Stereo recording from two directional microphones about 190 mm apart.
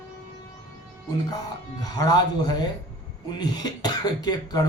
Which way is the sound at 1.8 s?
20° left (ahead or behind).